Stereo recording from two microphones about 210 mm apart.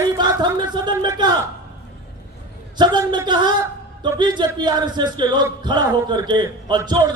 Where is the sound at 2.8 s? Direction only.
20° right (ahead or behind).